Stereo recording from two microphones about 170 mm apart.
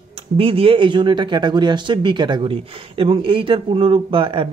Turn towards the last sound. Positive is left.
turn(degrees=-30)  # may be behind; listen again after turning